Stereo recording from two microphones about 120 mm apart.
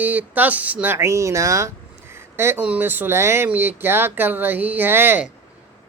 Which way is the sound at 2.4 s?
20° right (ahead or behind).